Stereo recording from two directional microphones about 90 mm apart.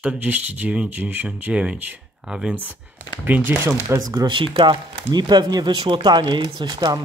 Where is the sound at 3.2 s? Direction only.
20° right (ahead or behind).